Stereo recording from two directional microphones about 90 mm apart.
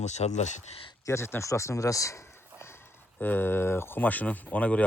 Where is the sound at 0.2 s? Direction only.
90° left.